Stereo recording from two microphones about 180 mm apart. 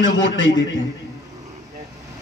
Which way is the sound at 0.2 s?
90° left.